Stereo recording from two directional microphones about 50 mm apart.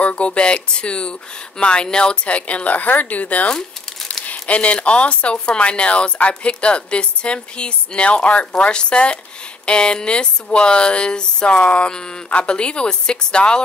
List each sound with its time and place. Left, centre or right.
0.0 s speech: left
3.5 s crumpling: centre
4.3 s speech: left